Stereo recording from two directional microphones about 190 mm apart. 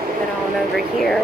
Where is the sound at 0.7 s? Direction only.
Centre (ahead or behind).